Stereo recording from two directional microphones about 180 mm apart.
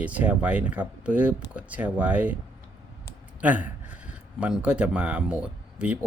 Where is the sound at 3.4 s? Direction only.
5° right (ahead or behind).